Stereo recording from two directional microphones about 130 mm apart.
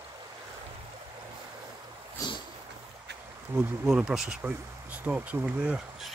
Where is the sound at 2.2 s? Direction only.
25° left (ahead or behind).